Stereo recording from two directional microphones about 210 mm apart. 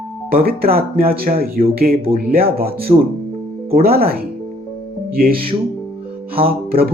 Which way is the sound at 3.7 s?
45° right (ahead or behind).